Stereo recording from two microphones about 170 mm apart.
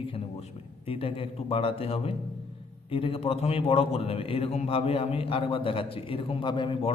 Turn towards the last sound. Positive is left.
turn(degrees=30)  # may be behind; listen again after turning